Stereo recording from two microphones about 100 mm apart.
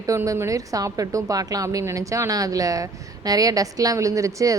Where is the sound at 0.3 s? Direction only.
35° right (ahead or behind).